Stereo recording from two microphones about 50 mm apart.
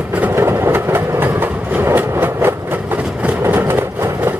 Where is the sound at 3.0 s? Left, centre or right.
Right.